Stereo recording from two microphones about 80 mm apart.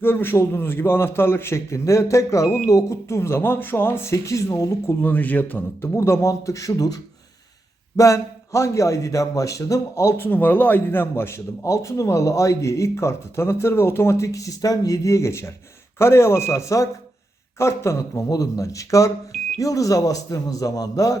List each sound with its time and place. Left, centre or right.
0.0 s a man's voice: left
4.1 s a man's voice: left
5.0 s a man's voice: left
6.0 s a man's voice: left